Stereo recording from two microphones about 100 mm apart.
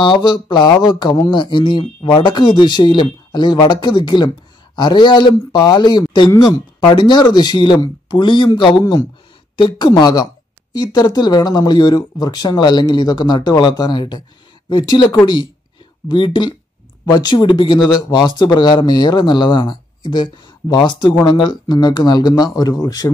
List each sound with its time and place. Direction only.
0.0 s speech: 55° left (ahead or behind)